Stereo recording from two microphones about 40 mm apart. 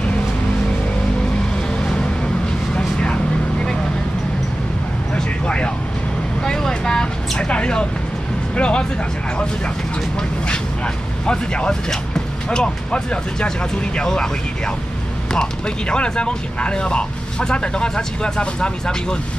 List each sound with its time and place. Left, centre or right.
2.7 s vehicle: left
5.1 s vehicle: left
8.5 s music: left
11.2 s speech: left
14.0 s speech: centre
15.9 s speech: left